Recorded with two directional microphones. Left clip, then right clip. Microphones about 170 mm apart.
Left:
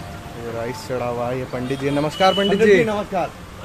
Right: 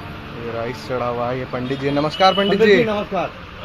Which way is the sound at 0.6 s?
15° left (ahead or behind).